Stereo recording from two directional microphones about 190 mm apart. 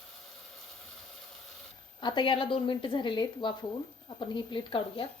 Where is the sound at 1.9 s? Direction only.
25° left (ahead or behind).